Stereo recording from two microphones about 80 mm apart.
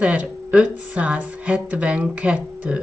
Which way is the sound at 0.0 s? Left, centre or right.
Centre.